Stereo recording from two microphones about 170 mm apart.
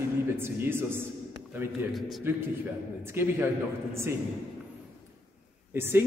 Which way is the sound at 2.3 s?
10° right (ahead or behind).